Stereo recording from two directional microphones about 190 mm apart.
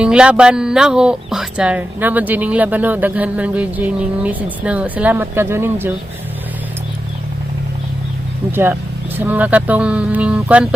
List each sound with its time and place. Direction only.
0.0 s speech: 5° right (ahead or behind)
8.5 s speech: 10° right (ahead or behind)